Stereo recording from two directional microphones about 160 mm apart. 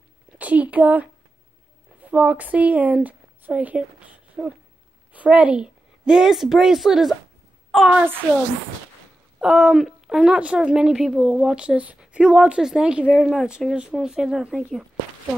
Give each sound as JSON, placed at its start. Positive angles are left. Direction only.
{"t": 0.4, "sound": "a sound", "side_deg": -10}
{"t": 2.0, "sound": "a woman's voice", "side_deg": -10}
{"t": 9.4, "sound": "a woman's voice", "side_deg": -5}